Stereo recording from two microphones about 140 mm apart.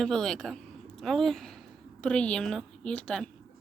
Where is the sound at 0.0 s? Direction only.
5° left (ahead or behind).